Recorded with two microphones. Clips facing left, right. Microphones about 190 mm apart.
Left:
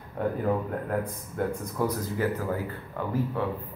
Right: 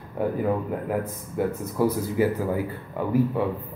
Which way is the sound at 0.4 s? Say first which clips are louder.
Right 2 dB; 10° right (ahead or behind).